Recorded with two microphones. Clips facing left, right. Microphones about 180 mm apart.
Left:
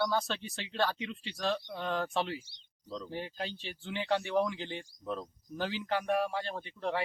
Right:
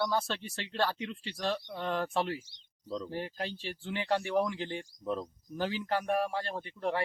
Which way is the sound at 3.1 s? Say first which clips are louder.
Right 2 dB; centre (ahead or behind).